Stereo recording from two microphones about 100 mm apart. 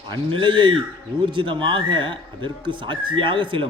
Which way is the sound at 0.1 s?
55° right (ahead or behind).